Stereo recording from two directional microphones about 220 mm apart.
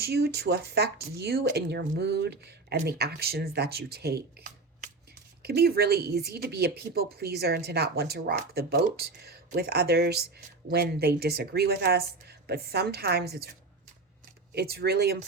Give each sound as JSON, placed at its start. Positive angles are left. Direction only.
{"t": 0.0, "sound": "a woman's voice", "side_deg": -45}
{"t": 14.5, "sound": "a woman's voice", "side_deg": -45}